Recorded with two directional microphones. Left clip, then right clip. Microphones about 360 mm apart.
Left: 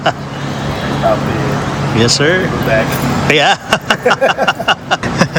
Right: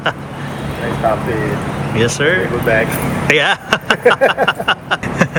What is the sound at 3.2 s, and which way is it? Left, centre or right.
Vehicle, centre.